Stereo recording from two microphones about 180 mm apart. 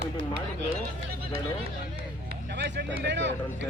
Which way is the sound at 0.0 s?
70° right (ahead or behind).